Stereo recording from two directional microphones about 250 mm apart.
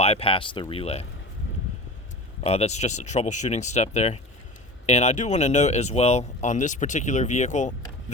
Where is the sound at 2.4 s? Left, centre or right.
Left.